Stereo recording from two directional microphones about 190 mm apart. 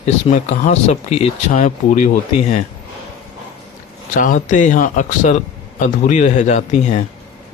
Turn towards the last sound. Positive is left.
turn(degrees=40)  # may be behind; listen again after turning